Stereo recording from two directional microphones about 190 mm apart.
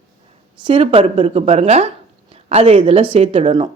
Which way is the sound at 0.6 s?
30° right (ahead or behind).